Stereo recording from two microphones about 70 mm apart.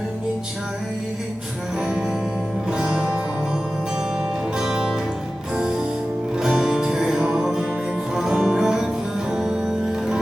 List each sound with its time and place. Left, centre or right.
1.8 s music: centre
4.5 s music: centre
6.3 s music: centre